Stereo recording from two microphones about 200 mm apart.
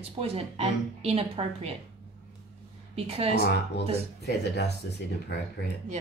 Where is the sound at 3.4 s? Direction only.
55° left (ahead or behind).